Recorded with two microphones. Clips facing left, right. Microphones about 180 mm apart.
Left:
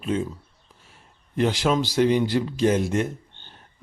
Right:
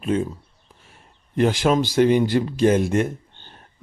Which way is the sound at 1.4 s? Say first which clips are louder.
Right 3 dB; 55° right (ahead or behind).